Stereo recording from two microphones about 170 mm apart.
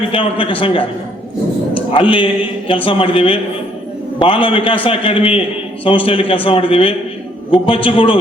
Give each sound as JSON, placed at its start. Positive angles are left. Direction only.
{"t": 0.1, "sound": "a man's voice", "side_deg": 30}
{"t": 1.9, "sound": "a man's voice", "side_deg": 30}